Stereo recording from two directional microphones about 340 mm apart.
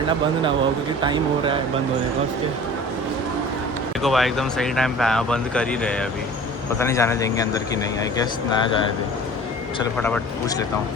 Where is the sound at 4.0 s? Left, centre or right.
Centre.